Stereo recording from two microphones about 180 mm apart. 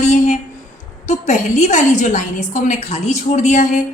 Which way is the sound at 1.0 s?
40° left (ahead or behind).